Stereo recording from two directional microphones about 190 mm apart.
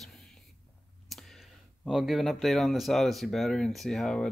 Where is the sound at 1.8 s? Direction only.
Centre (ahead or behind).